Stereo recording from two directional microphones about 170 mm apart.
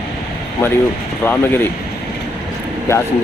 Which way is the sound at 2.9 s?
15° left (ahead or behind).